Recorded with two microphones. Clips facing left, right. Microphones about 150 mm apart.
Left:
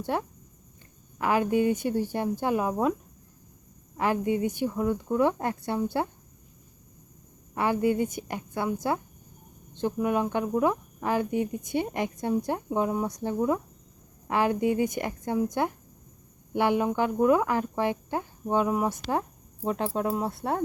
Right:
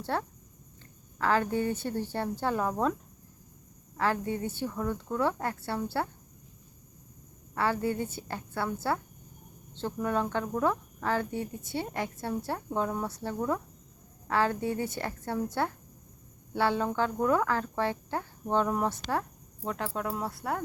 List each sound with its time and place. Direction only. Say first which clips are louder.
0.0 s speech: left 3 dB; 15° left (ahead or behind)
3.9 s speech: left 4 dB; 15° left (ahead or behind)
7.5 s speech: left 4 dB; 15° left (ahead or behind)